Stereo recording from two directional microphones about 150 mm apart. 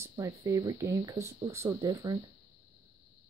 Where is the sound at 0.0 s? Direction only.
20° right (ahead or behind).